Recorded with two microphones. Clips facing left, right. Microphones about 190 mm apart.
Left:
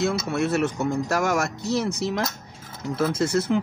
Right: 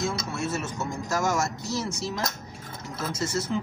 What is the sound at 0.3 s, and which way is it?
Speech, 65° left (ahead or behind).